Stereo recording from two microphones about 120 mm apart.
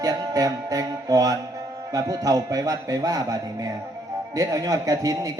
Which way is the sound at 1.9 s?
30° right (ahead or behind).